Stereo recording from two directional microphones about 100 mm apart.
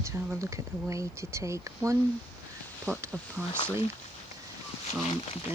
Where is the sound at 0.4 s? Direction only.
30° right (ahead or behind).